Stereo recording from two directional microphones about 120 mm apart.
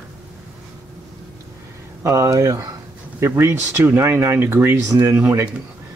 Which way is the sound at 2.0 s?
25° right (ahead or behind).